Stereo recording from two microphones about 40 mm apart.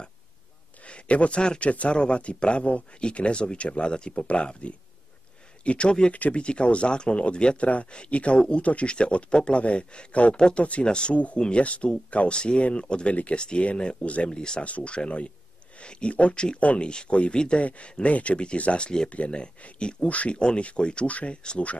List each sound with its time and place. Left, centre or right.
0.8 s speech: left
11.6 s speech: left
13.1 s speech: left
13.4 s speech: left
14.3 s speech: left
14.6 s speech: left
20.1 s speech: left
20.3 s speech: left